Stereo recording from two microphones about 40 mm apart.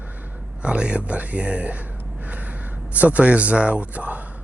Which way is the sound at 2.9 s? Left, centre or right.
Right.